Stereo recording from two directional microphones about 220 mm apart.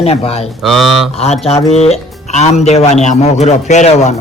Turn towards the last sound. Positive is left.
turn(degrees=30)  # may be behind; listen again after turning